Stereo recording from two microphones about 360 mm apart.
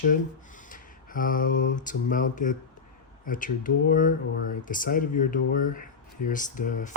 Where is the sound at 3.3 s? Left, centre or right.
Left.